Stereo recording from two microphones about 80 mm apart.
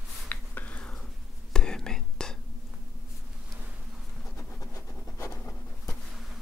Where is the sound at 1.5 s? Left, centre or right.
Centre.